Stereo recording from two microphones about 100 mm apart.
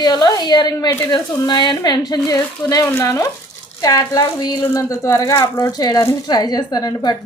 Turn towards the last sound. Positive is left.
turn(degrees=40)  # may be behind; listen again after turning